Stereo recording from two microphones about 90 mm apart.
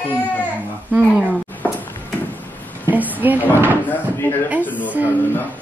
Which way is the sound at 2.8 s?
20° right (ahead or behind).